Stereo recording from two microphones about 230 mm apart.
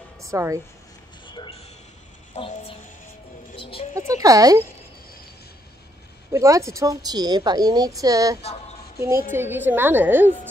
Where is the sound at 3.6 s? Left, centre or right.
Left.